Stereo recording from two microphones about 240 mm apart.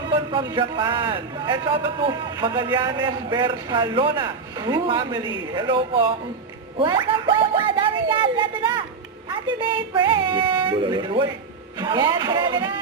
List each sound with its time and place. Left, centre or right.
0.1 s a man's voice: centre